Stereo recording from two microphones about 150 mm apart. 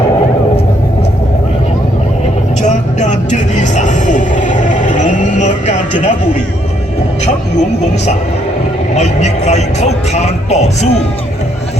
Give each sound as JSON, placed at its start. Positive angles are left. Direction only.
{"t": 2.6, "sound": "vehicle", "side_deg": 50}
{"t": 9.0, "sound": "speech", "side_deg": 45}